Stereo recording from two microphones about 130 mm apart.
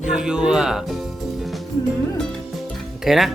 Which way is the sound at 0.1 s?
5° right (ahead or behind).